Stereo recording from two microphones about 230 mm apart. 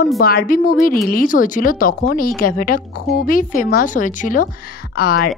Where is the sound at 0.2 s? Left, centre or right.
Left.